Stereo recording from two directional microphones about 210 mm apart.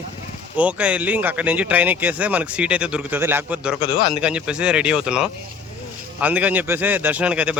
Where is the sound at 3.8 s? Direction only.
25° left (ahead or behind).